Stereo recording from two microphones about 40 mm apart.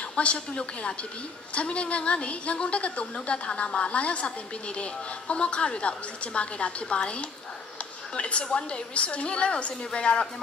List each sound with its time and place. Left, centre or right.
0.1 s a woman's voice: left
5.3 s a woman's voice: left